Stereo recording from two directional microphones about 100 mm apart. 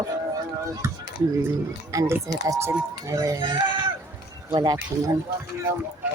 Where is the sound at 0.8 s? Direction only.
25° right (ahead or behind).